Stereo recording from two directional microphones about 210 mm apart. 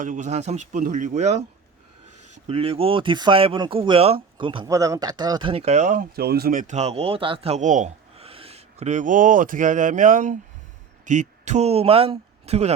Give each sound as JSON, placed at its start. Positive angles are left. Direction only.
{"t": 0.0, "sound": "a man's voice", "side_deg": -35}